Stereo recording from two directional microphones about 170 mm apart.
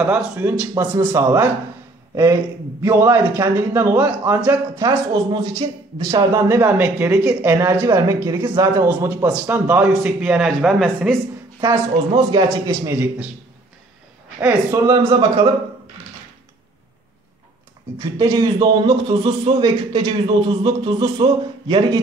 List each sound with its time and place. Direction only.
0.0 s a man's voice: 10° right (ahead or behind)
2.8 s a man's voice: 15° right (ahead or behind)
4.8 s a man's voice: 25° right (ahead or behind); by 11.1 s centre (ahead or behind)
12.1 s speech: 30° right (ahead or behind)
12.4 s a man's voice: 15° right (ahead or behind)
14.4 s speech: 15° right (ahead or behind)
15.0 s speech: 30° right (ahead or behind)
18.1 s speech: 20° right (ahead or behind)